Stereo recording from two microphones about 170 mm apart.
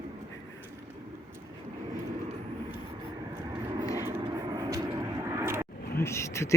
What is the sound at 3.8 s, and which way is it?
Vehicle, 20° left (ahead or behind).